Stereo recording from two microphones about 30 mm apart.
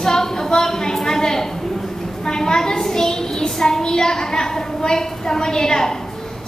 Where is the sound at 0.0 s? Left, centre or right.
Centre.